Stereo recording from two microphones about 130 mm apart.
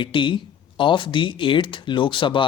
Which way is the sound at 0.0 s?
40° left (ahead or behind).